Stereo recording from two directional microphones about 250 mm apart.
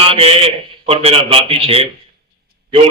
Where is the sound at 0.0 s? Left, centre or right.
Right.